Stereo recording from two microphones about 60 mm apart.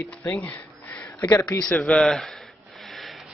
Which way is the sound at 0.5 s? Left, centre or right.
Left.